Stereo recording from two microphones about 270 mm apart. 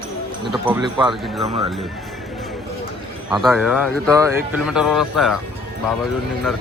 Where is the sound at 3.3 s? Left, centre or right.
Centre.